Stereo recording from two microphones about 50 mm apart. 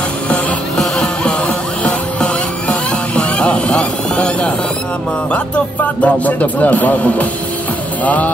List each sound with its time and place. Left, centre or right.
0.7 s music: centre
1.9 s music: left
6.0 s speech: left
8.0 s music: left